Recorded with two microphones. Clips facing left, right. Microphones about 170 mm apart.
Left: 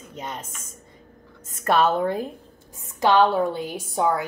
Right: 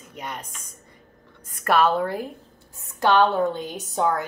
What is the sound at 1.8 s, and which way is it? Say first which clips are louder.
A woman's voice: left 1 dB; 20° left (ahead or behind).